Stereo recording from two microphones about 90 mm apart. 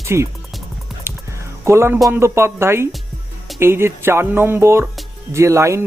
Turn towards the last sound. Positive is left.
turn(degrees=-35)  # may be behind; listen again after turning